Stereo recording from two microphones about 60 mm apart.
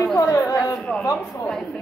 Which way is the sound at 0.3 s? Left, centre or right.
Left.